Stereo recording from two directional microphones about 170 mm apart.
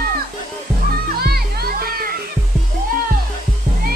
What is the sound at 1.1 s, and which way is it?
Music, 65° right (ahead or behind).